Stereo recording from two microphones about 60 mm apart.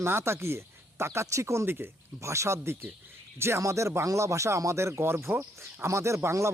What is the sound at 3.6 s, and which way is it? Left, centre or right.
Speech, right.